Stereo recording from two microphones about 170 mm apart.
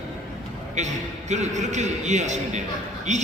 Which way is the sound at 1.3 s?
45° right (ahead or behind).